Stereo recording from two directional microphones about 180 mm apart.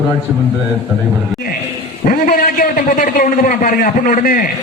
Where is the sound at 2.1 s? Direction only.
50° left (ahead or behind).